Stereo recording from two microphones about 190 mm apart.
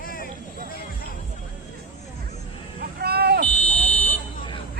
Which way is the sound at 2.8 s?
55° right (ahead or behind).